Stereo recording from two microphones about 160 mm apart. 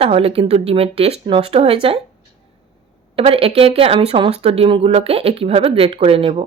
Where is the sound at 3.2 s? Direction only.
35° right (ahead or behind).